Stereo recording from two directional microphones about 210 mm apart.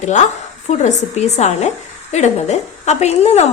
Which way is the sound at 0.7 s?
35° left (ahead or behind).